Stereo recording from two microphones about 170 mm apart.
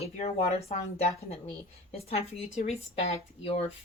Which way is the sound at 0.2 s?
40° left (ahead or behind).